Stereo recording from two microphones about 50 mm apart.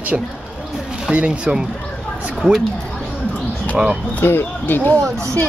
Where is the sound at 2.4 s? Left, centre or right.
Centre.